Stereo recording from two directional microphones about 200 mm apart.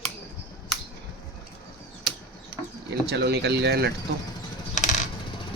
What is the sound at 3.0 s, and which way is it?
Speech, 55° right (ahead or behind).